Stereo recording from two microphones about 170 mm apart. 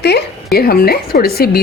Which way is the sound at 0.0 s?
70° left (ahead or behind).